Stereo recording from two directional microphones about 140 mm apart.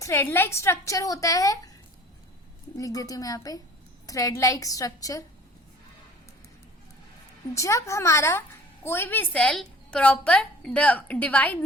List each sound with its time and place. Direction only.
0.0 s a woman's voice: 15° left (ahead or behind)
2.7 s a woman's voice: 25° left (ahead or behind)
7.5 s a woman's voice: 20° left (ahead or behind)